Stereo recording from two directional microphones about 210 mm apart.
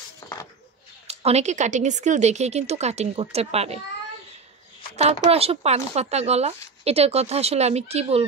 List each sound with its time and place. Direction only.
1.0 s a woman's voice: 30° right (ahead or behind)
5.2 s speech: 30° right (ahead or behind)